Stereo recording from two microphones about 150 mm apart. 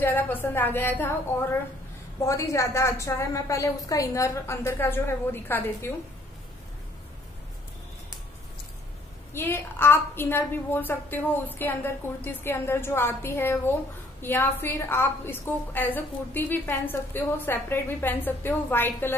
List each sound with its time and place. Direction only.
0.0 s a woman's voice: 15° left (ahead or behind)
2.2 s a woman's voice: 20° left (ahead or behind)
9.3 s a woman's voice: 15° left (ahead or behind)